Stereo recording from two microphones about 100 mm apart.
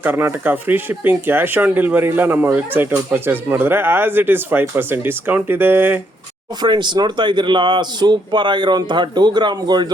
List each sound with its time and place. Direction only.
0.0 s speech: 20° right (ahead or behind)
6.6 s speech: 50° right (ahead or behind)